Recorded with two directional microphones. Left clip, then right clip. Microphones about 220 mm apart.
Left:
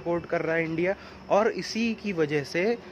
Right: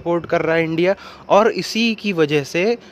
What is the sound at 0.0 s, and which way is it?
Speech, 40° right (ahead or behind).